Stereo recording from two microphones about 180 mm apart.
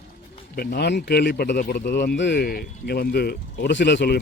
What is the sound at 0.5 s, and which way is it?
A man's voice, 55° left (ahead or behind).